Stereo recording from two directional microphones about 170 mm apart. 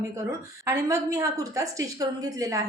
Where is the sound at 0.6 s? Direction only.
15° right (ahead or behind).